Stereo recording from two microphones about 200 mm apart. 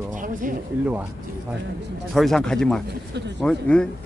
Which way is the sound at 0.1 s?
40° right (ahead or behind).